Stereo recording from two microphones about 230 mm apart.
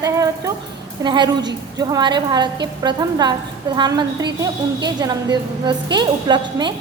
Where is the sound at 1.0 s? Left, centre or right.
Centre.